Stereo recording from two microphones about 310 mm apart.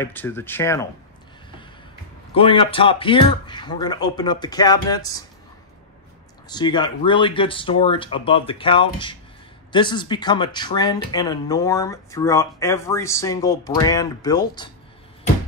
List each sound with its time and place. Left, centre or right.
0.0 s speech: centre
2.3 s speech: centre
6.5 s speech: centre